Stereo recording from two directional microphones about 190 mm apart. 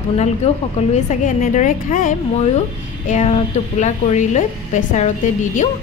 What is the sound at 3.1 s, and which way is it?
A woman's voice, 35° left (ahead or behind).